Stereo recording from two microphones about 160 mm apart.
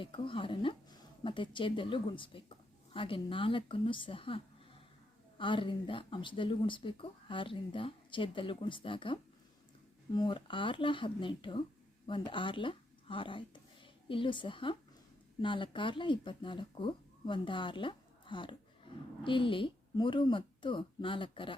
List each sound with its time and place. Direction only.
0.0 s speech: 35° left (ahead or behind)